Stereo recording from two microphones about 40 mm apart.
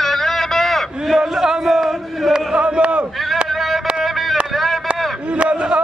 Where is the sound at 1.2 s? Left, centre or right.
Centre.